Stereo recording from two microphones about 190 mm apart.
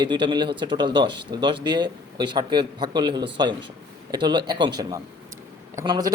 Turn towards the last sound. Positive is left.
turn(degrees=-20)  # may be behind; listen again after turning